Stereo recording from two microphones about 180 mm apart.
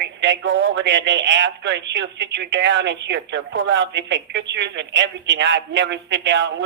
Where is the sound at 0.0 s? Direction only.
80° right.